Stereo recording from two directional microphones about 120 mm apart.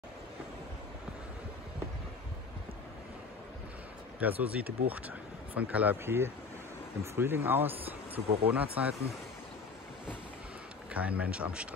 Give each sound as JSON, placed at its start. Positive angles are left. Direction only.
{"t": 4.2, "sound": "speech", "side_deg": -15}
{"t": 10.9, "sound": "speech", "side_deg": -10}